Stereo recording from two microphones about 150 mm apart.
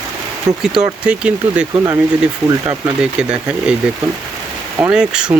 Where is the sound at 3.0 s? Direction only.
5° right (ahead or behind).